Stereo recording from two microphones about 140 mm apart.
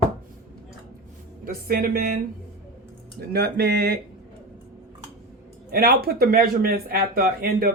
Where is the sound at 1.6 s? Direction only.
90° right.